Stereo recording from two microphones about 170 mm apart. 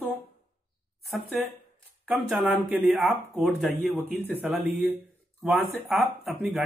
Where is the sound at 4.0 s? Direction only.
10° left (ahead or behind).